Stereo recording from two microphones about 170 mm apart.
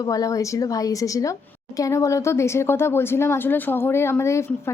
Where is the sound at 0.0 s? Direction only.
20° left (ahead or behind).